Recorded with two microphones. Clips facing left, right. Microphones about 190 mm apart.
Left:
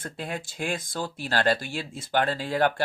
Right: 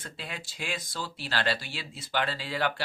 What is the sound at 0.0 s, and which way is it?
Speech, 50° left (ahead or behind).